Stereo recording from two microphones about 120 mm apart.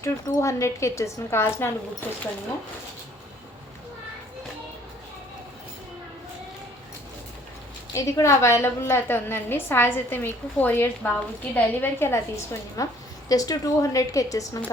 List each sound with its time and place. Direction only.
0.0 s a woman's voice: 25° left (ahead or behind)
7.9 s a woman's voice: 25° left (ahead or behind)